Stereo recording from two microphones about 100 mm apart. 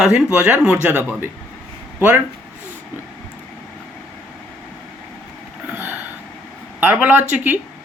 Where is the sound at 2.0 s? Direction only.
20° right (ahead or behind).